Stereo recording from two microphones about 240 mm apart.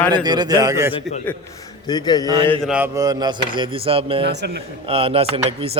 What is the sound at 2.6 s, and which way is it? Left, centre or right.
Speech, centre.